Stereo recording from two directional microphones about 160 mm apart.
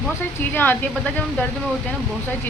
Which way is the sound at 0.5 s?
10° left (ahead or behind).